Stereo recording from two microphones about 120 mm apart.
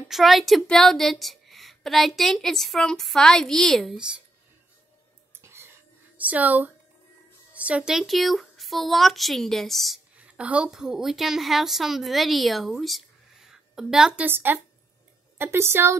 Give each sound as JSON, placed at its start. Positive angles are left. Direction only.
{"t": 0.1, "sound": "a woman's voice", "side_deg": 0}
{"t": 5.3, "sound": "whispering", "side_deg": -20}
{"t": 6.1, "sound": "a woman's voice", "side_deg": -15}
{"t": 10.1, "sound": "a woman's voice", "side_deg": -10}
{"t": 14.2, "sound": "a woman's voice", "side_deg": -15}